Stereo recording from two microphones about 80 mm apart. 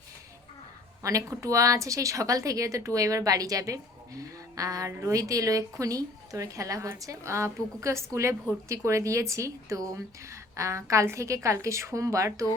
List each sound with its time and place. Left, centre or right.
1.2 s a woman's voice: right